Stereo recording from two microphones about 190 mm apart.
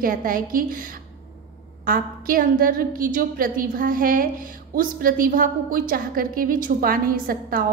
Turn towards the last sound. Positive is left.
turn(degrees=-50)  # may be behind; listen again after turning